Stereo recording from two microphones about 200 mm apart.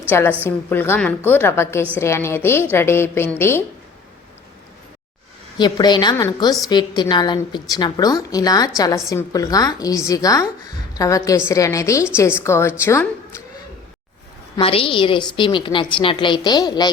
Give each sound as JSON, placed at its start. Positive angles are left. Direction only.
{"t": 0.1, "sound": "a woman's voice", "side_deg": 10}
{"t": 5.5, "sound": "a woman's voice", "side_deg": 20}
{"t": 14.5, "sound": "a woman's voice", "side_deg": 30}